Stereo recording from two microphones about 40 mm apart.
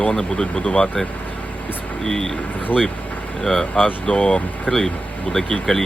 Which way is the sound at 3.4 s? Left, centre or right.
Centre.